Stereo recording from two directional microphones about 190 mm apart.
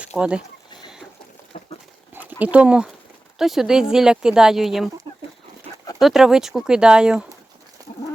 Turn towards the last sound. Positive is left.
turn(degrees=-5)  # may be behind; listen again after turning